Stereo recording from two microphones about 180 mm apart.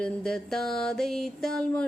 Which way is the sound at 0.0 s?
5° left (ahead or behind).